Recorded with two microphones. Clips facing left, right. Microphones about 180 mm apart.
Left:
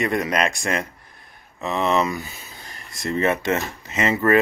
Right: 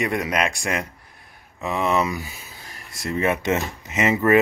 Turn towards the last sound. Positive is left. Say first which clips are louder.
# right 1 dB
turn(degrees=-15)  # may be behind; listen again after turning